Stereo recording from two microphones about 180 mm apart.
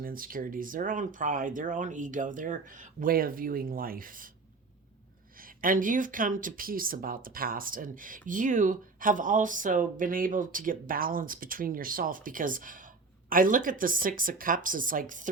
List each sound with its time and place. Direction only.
0.0 s speech: 50° right (ahead or behind)
5.4 s speech: 50° right (ahead or behind)